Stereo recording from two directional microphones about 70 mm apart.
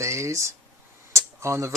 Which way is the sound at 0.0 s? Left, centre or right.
Right.